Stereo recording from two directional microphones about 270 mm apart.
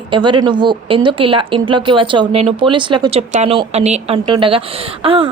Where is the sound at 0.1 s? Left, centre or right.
Centre.